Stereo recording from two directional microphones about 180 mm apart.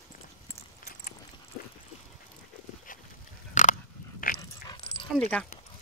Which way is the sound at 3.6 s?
40° left (ahead or behind).